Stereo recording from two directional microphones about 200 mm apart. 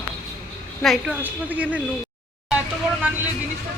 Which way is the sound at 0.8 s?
Centre (ahead or behind).